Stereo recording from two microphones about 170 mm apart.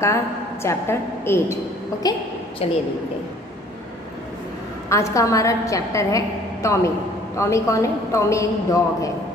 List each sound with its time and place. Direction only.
0.0 s a woman's voice: 15° left (ahead or behind)
2.6 s a woman's voice: 35° left (ahead or behind)
4.8 s a woman's voice: 15° left (ahead or behind)